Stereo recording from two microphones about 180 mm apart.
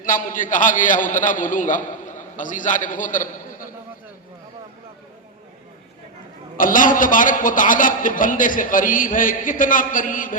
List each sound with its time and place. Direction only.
0.0 s a man's voice: 50° left (ahead or behind)
6.6 s a man's voice: 50° left (ahead or behind)